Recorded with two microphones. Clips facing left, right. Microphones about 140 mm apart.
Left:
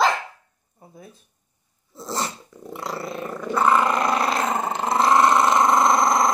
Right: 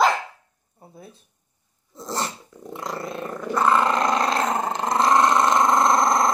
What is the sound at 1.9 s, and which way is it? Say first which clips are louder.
Dog: even; 10° left (ahead or behind).